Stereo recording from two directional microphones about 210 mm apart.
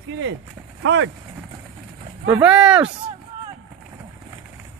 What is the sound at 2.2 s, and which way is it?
Speech, 5° right (ahead or behind).